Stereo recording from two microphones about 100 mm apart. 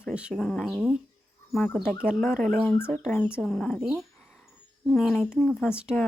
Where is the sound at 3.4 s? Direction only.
5° left (ahead or behind).